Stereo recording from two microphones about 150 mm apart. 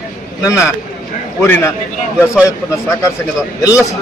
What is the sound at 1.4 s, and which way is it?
A man's voice, 15° left (ahead or behind).